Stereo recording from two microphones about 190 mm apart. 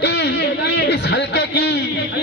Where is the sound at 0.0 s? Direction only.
60° left (ahead or behind).